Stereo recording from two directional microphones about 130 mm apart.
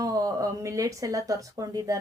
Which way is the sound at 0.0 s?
30° right (ahead or behind).